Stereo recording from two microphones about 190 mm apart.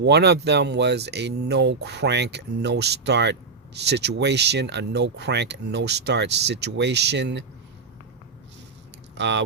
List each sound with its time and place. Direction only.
0.0 s speech: 60° right (ahead or behind)
9.1 s speech: 70° right (ahead or behind)